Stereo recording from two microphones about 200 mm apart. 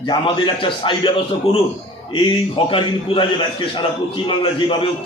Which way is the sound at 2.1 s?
25° left (ahead or behind).